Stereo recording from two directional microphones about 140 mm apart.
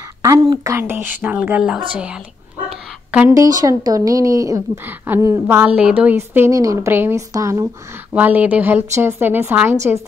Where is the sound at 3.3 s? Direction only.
25° right (ahead or behind).